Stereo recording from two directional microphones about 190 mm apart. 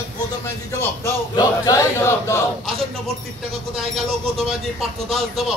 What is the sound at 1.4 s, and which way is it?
Battle cry, 15° left (ahead or behind).